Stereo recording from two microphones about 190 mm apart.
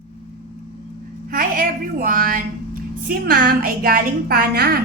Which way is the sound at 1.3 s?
45° right (ahead or behind).